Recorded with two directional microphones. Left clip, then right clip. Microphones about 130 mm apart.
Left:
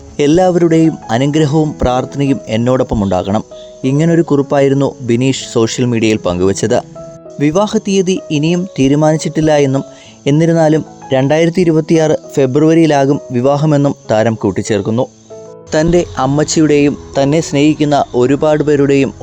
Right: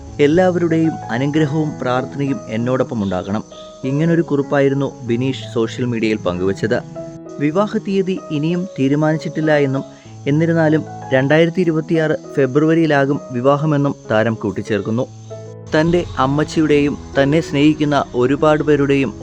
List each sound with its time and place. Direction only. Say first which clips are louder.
0.2 s speech: left 4 dB; 45° left (ahead or behind); by 19.1 s 30° left (ahead or behind)